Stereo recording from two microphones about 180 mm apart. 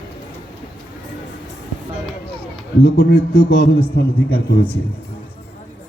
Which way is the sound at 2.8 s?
65° left (ahead or behind).